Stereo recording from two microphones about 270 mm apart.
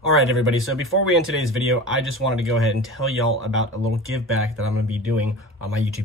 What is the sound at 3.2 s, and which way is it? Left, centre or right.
Speech, right.